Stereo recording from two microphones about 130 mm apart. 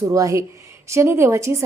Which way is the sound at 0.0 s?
25° right (ahead or behind).